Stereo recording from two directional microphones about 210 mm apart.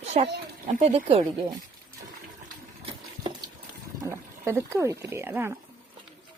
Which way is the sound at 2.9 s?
25° right (ahead or behind).